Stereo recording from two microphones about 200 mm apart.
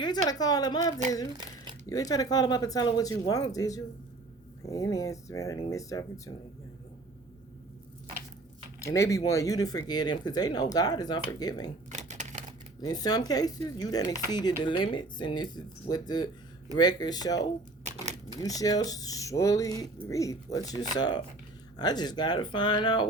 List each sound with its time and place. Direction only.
0.0 s speech: 20° left (ahead or behind)
8.8 s speech: 15° left (ahead or behind)
11.9 s typewriter: 35° right (ahead or behind)
12.8 s speech: 20° left (ahead or behind)
17.8 s a sound: 35° right (ahead or behind)
18.3 s speech: 15° left (ahead or behind)